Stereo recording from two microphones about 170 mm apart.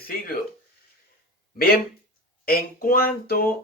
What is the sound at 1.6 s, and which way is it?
Speech, 60° left (ahead or behind).